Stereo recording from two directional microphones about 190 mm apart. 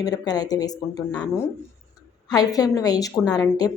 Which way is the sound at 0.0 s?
20° left (ahead or behind).